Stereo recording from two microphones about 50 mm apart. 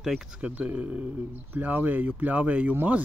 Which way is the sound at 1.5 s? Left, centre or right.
Right.